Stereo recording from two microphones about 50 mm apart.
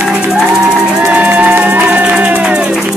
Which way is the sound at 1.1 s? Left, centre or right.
Right.